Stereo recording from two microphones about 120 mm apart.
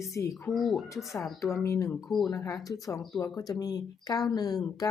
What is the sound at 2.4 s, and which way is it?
Speech, 30° left (ahead or behind).